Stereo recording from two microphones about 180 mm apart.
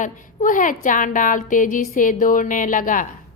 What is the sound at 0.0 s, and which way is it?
A woman's voice, 45° left (ahead or behind).